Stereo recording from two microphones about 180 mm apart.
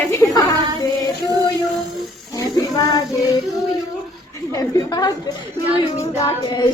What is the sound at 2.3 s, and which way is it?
Speech, 20° left (ahead or behind).